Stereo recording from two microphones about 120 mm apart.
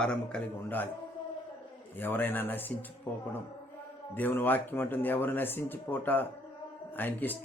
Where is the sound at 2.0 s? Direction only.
15° left (ahead or behind).